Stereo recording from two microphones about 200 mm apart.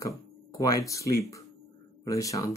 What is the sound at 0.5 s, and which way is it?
Speech, 15° left (ahead or behind).